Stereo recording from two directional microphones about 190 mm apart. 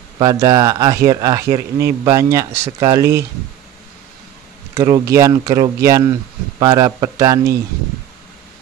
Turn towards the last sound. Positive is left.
turn(degrees=-15)  # may be behind; listen again after turning